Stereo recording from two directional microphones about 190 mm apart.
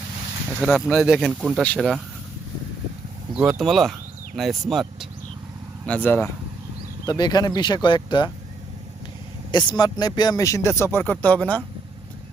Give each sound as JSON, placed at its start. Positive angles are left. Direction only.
{"t": 0.6, "sound": "speech", "side_deg": 0}
{"t": 3.3, "sound": "a man's voice", "side_deg": 0}
{"t": 9.5, "sound": "a man's voice", "side_deg": 25}